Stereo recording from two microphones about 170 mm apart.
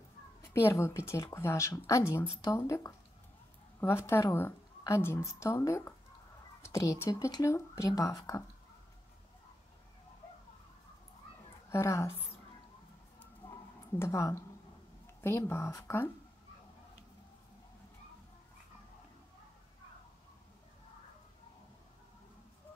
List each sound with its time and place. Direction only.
0.4 s a woman's voice: 15° left (ahead or behind)
11.7 s a woman's voice: 15° left (ahead or behind)
13.2 s a sound: 15° left (ahead or behind)
15.2 s a woman's voice: 15° left (ahead or behind)